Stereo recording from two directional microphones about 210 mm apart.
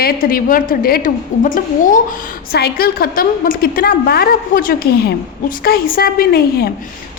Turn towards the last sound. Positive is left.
turn(degrees=50)  # may be behind; listen again after turning